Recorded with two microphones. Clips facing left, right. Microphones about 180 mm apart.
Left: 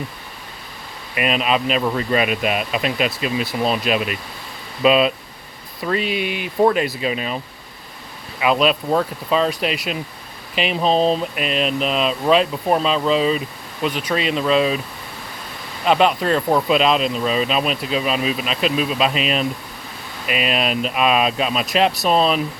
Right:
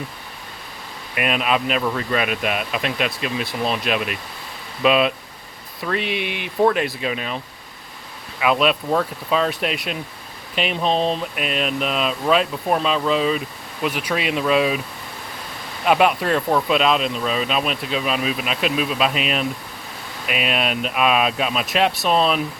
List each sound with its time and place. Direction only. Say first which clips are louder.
1.1 s speech: left 1 dB; centre (ahead or behind)
1.8 s speech: left 2 dB; 15° left (ahead or behind)
2.1 s speech: left 4 dB; centre (ahead or behind)
15.9 s speech: left 1 dB; 5° right (ahead or behind)